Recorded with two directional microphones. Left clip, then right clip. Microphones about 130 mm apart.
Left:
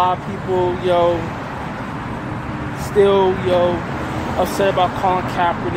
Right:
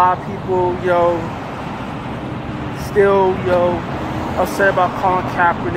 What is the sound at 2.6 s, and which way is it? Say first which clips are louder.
Speech: even; 20° left (ahead or behind).